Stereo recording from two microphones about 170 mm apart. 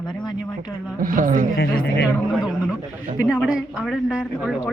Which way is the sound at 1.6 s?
65° left (ahead or behind).